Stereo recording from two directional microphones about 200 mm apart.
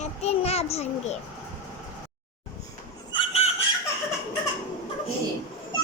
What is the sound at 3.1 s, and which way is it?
Chicken, 30° left (ahead or behind).